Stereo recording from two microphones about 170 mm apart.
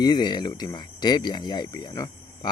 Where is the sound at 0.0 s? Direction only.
25° left (ahead or behind).